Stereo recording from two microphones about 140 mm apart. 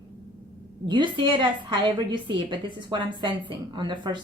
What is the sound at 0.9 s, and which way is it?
A woman's voice, 35° right (ahead or behind).